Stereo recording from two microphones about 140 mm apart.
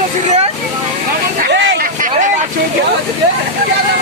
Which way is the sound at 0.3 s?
50° right (ahead or behind).